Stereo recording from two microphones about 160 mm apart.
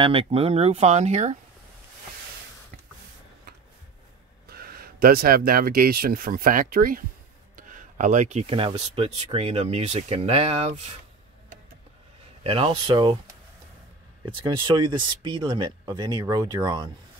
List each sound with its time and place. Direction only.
0.0 s speech: 35° right (ahead or behind)
4.5 s speech: 70° right (ahead or behind); by 11.0 s 40° right (ahead or behind)
12.4 s speech: 35° right (ahead or behind)
14.2 s speech: 30° right (ahead or behind)